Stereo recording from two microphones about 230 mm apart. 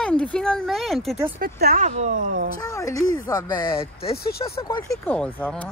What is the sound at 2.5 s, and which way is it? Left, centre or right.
Speech, centre.